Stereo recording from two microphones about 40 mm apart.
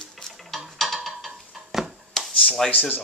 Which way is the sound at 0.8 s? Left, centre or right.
Centre.